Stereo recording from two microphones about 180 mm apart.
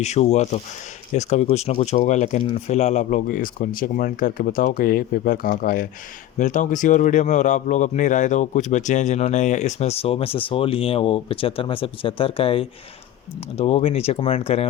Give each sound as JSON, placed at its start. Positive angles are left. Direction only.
{"t": 0.0, "sound": "speech", "side_deg": 40}